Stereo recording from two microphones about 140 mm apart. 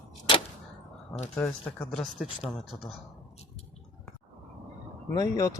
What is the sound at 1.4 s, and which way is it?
Speech, 10° left (ahead or behind).